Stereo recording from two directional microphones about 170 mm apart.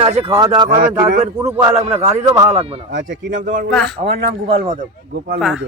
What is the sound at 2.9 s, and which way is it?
Speech, 90° right.